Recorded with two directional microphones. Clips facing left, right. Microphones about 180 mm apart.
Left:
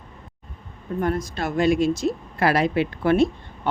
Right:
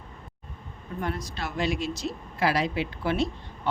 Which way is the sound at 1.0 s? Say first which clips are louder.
Left 7 dB; 45° left (ahead or behind).